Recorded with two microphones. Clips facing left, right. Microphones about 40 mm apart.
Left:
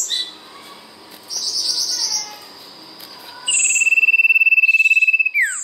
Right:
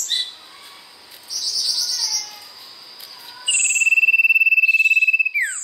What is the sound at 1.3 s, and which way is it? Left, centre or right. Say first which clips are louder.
Cricket: left 1 dB; centre.